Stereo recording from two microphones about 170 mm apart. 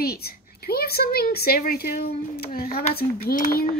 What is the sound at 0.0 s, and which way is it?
A woman's voice, 65° left (ahead or behind).